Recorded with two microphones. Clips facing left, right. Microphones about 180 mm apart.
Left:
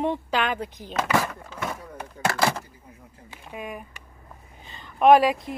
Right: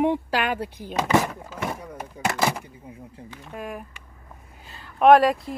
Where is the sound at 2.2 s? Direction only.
15° right (ahead or behind).